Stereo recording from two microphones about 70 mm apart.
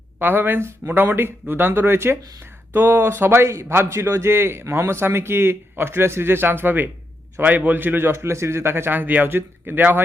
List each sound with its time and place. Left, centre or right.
0.2 s a man's voice: right